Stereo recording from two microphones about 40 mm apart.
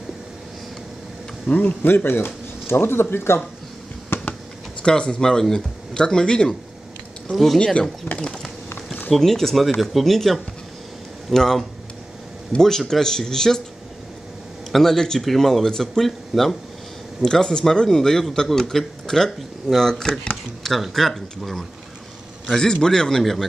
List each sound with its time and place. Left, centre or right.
1.5 s a man's voice: left
2.0 s speech: left
4.1 s a sound: left
4.8 s speech: left
5.2 s a man's voice: centre
7.5 s a man's voice: centre
14.7 s a man's voice: centre
15.7 s a man's voice: centre
16.0 s speech: centre
17.2 s a man's voice: centre
22.5 s a man's voice: centre